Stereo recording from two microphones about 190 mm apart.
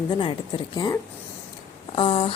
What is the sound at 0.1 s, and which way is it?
Speech, 25° left (ahead or behind).